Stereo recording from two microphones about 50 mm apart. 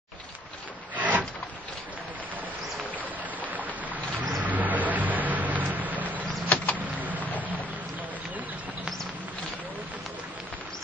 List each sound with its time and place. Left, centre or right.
0.9 s wood: right
3.3 s a sound: right
4.4 s vehicle: right
6.5 s vehicle: left
6.9 s vehicle: right